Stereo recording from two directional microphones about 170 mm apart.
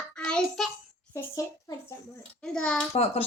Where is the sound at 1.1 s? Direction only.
20° left (ahead or behind).